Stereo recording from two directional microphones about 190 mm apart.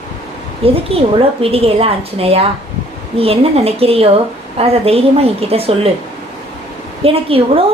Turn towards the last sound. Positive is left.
turn(degrees=-30)  # may be behind; listen again after turning